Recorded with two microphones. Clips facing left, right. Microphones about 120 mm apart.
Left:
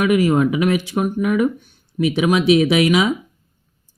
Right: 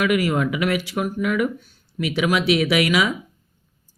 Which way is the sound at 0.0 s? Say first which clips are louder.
Left 5 dB; 25° left (ahead or behind).